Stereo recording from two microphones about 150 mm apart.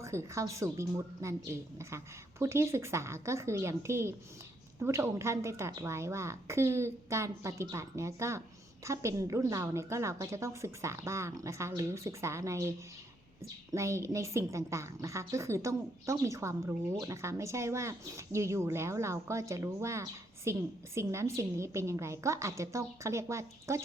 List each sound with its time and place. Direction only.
0.0 s a woman's voice: 20° right (ahead or behind)
13.7 s a woman's voice: 20° right (ahead or behind)